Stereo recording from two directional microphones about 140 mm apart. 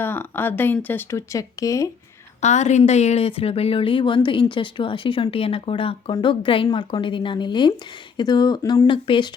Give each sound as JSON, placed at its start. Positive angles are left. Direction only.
{"t": 0.0, "sound": "speech", "side_deg": 15}
{"t": 2.4, "sound": "a woman's voice", "side_deg": 55}